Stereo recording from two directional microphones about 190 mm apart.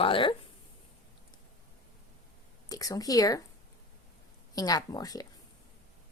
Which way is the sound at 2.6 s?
20° left (ahead or behind).